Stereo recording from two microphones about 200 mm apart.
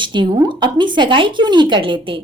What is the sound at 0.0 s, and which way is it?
A woman's voice, 25° right (ahead or behind).